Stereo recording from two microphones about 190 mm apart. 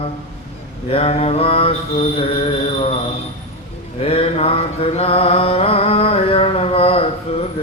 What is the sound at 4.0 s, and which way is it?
Mantra, 30° left (ahead or behind).